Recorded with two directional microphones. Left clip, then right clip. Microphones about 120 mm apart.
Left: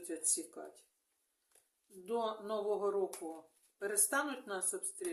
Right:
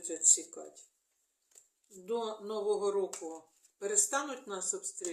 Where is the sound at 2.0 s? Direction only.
30° left (ahead or behind).